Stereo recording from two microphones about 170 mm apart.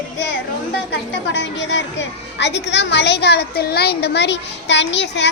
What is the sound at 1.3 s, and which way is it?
A child's voice, 90° left.